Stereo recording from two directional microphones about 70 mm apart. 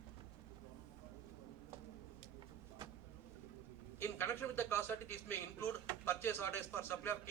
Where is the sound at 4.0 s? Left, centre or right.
Left.